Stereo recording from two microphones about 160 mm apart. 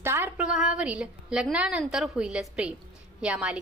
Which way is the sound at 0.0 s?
15° right (ahead or behind).